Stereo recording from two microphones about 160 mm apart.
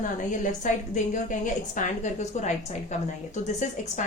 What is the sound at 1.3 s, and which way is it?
Speech, 55° left (ahead or behind).